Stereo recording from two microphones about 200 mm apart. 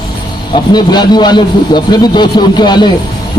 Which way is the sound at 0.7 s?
20° left (ahead or behind).